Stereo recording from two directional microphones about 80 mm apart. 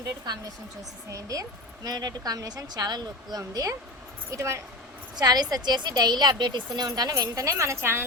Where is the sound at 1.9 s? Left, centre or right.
Right.